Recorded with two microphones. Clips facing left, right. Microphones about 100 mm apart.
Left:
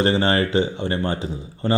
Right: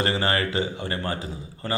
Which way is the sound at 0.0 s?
30° left (ahead or behind).